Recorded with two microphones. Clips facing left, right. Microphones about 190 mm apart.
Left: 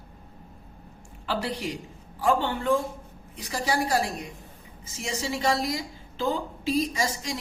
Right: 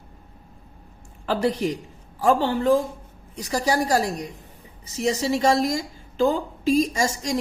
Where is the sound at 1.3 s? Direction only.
45° right (ahead or behind).